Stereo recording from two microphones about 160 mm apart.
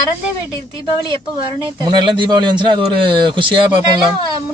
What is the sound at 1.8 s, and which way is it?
A man's voice, 30° right (ahead or behind).